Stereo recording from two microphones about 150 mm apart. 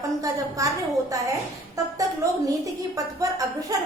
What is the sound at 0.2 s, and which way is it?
Speech, 20° right (ahead or behind).